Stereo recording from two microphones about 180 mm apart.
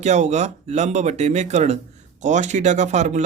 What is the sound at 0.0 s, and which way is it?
Speech, 40° right (ahead or behind).